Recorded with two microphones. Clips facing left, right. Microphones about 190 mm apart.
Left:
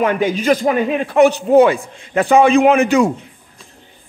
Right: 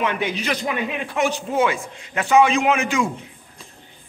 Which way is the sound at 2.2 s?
55° left (ahead or behind).